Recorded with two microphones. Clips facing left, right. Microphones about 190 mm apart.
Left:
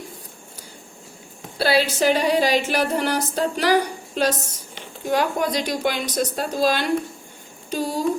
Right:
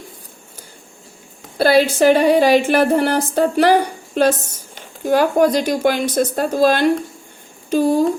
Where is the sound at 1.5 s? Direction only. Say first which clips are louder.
Right 6 dB; 50° right (ahead or behind).